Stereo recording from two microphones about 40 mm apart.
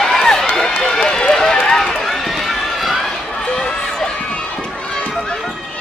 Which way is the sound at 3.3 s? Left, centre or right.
Left.